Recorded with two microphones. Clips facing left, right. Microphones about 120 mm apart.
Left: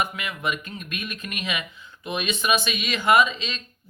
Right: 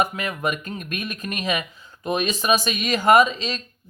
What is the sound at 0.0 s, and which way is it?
Speech, 40° right (ahead or behind).